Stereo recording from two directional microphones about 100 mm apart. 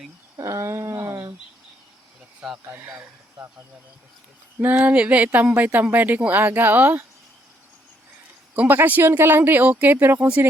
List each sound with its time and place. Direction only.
0.3 s humming: 30° right (ahead or behind)
2.6 s speech: 20° right (ahead or behind)
4.6 s speech: 20° right (ahead or behind)
8.5 s speech: 20° right (ahead or behind)